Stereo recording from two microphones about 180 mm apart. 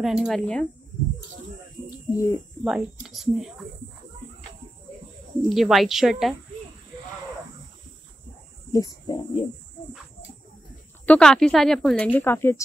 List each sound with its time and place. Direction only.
0.0 s speech: 5° right (ahead or behind)
1.9 s a sound: 20° left (ahead or behind)
2.6 s speech: centre (ahead or behind)
5.5 s speech: centre (ahead or behind)
8.7 s speech: 20° left (ahead or behind)
11.1 s speech: 5° left (ahead or behind)